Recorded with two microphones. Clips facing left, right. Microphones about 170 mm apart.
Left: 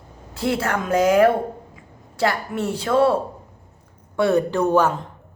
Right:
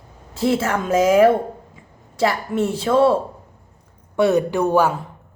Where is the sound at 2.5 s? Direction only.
25° right (ahead or behind).